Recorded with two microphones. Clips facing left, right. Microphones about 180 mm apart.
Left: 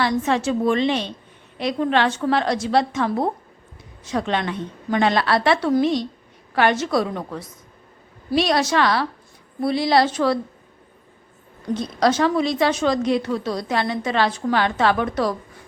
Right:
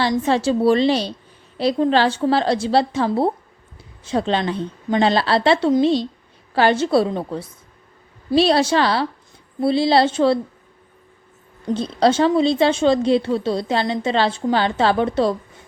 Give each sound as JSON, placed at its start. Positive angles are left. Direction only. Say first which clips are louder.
{"t": 0.0, "sound": "a woman's voice", "louder": "right 2 dB", "side_deg": -30}
{"t": 11.7, "sound": "a woman's voice", "louder": "right 3 dB", "side_deg": -30}